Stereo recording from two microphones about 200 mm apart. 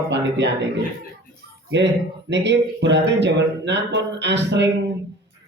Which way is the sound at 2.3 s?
60° right (ahead or behind).